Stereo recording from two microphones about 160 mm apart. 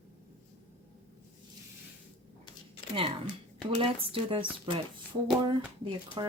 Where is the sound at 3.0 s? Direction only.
35° right (ahead or behind).